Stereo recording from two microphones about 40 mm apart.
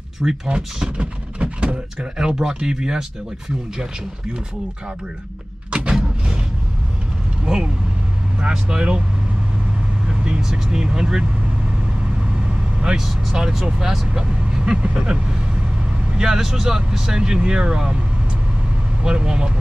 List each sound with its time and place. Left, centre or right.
0.2 s speech: centre
0.9 s speech: right
2.0 s speech: centre
5.9 s vehicle: centre
7.4 s speech: centre
10.0 s vehicle: right
10.4 s speech: centre
12.8 s speech: centre
19.0 s speech: right